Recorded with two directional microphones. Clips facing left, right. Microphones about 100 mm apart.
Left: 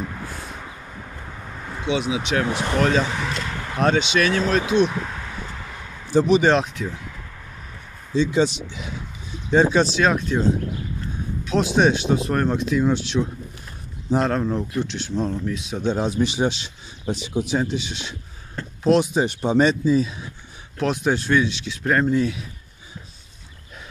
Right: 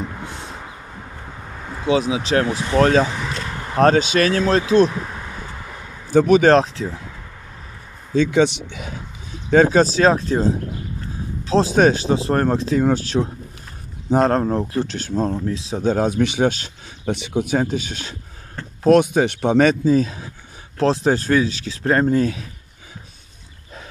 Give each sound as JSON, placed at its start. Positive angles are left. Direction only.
{"t": 0.2, "sound": "a sound", "side_deg": -25}
{"t": 1.9, "sound": "speech", "side_deg": -35}
{"t": 6.0, "sound": "speech", "side_deg": -55}
{"t": 8.1, "sound": "speech", "side_deg": -55}
{"t": 9.5, "sound": "speech", "side_deg": -40}
{"t": 17.0, "sound": "speech", "side_deg": -60}
{"t": 18.9, "sound": "speech", "side_deg": -55}